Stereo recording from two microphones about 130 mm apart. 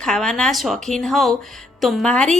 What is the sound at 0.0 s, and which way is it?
A woman's voice, 5° left (ahead or behind).